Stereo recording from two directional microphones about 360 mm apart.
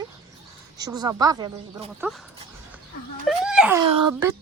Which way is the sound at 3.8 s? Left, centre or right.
Right.